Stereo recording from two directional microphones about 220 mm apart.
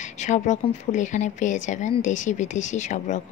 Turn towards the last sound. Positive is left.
turn(degrees=35)  # may be behind; listen again after turning